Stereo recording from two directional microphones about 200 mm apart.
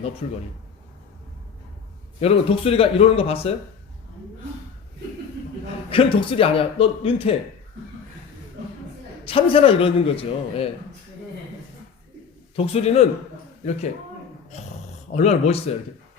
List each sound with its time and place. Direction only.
0.2 s a man's voice: 30° left (ahead or behind)
2.2 s a man's voice: 30° left (ahead or behind)
5.9 s a man's voice: 25° left (ahead or behind)
9.2 s a man's voice: 30° left (ahead or behind)
12.5 s a man's voice: 30° left (ahead or behind)
15.1 s a man's voice: 35° left (ahead or behind)